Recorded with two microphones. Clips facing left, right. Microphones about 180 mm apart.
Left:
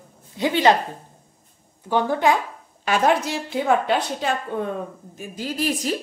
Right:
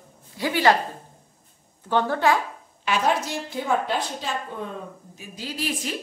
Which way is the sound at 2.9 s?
65° left (ahead or behind).